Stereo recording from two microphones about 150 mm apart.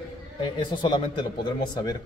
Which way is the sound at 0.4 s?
35° left (ahead or behind).